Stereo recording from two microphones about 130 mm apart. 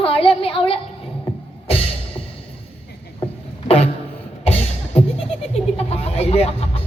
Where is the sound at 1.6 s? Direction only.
50° left (ahead or behind).